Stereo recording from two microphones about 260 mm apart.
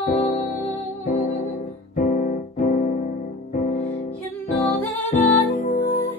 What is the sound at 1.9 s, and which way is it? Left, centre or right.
Piano, left.